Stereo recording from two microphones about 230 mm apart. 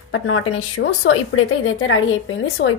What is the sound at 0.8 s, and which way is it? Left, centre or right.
Speech, left.